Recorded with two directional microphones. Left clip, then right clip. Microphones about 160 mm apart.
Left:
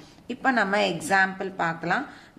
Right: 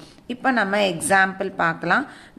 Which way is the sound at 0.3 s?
10° right (ahead or behind).